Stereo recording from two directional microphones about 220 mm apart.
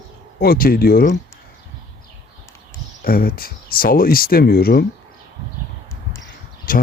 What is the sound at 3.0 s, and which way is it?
Speech, 40° left (ahead or behind).